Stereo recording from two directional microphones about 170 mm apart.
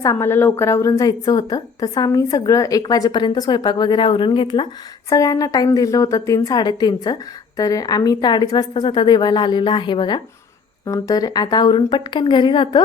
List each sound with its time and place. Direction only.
0.0 s a woman's voice: 15° left (ahead or behind)